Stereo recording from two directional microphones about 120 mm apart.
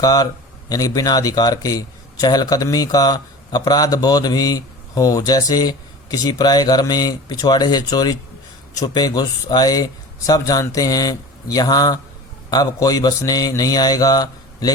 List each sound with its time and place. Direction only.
0.0 s speech: 30° left (ahead or behind)